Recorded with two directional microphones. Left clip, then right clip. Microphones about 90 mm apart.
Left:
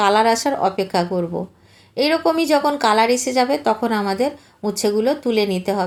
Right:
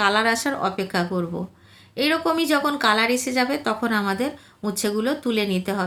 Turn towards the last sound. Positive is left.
turn(degrees=20)  # may be behind; listen again after turning